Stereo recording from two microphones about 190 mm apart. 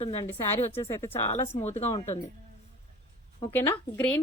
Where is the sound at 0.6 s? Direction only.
30° left (ahead or behind).